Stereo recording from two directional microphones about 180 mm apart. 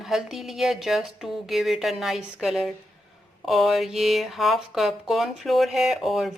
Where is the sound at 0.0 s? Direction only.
Centre (ahead or behind).